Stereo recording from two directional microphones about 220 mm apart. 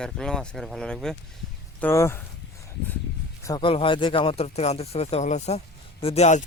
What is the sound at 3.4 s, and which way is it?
Speech, 20° left (ahead or behind).